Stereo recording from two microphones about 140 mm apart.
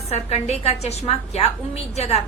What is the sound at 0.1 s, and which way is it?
A woman's voice, 50° left (ahead or behind).